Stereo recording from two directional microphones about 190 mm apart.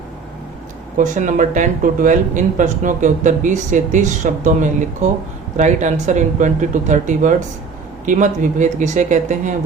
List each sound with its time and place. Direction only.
0.9 s speech: 40° right (ahead or behind)